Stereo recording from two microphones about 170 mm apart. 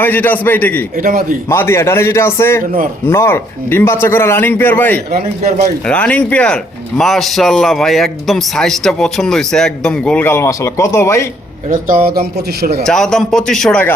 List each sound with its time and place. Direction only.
0.0 s a man's voice: 10° left (ahead or behind)
0.9 s speech: 55° right (ahead or behind)
1.5 s a man's voice: 15° left (ahead or behind)
11.7 s speech: 60° right (ahead or behind)
12.8 s speech: 5° left (ahead or behind)